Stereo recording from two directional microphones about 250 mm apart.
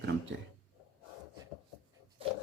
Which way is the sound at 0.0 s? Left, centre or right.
Right.